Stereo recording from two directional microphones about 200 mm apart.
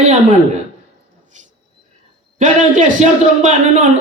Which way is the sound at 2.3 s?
40° right (ahead or behind).